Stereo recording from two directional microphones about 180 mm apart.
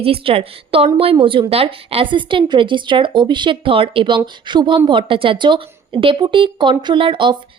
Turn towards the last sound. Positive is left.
turn(degrees=-30)  # may be behind; listen again after turning